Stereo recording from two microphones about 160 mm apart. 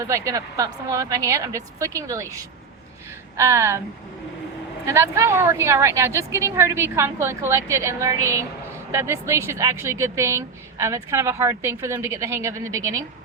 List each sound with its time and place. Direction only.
0.0 s a woman's voice: 20° right (ahead or behind)
4.9 s a woman's voice: 15° right (ahead or behind)